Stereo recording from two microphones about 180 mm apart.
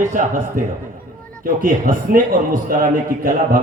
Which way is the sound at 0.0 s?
45° right (ahead or behind).